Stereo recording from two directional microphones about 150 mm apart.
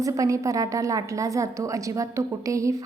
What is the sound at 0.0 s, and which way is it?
A woman's voice, 20° right (ahead or behind).